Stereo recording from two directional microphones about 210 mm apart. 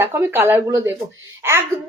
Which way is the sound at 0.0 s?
10° right (ahead or behind).